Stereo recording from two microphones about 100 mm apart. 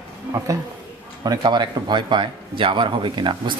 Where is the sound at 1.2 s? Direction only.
45° right (ahead or behind).